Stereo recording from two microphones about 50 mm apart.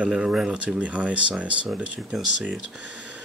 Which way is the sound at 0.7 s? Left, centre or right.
Right.